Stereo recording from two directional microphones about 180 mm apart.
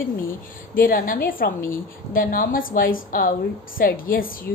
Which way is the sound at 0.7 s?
50° left (ahead or behind).